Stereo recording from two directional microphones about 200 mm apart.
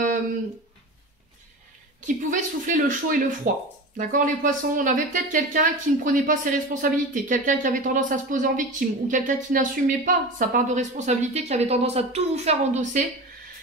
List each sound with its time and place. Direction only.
2.0 s a woman's voice: 40° right (ahead or behind)